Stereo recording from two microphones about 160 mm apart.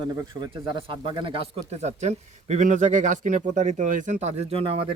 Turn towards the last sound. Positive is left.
turn(degrees=-35)  # may be behind; listen again after turning